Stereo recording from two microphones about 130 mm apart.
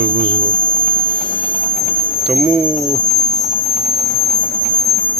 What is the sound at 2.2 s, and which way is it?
Speech, centre (ahead or behind).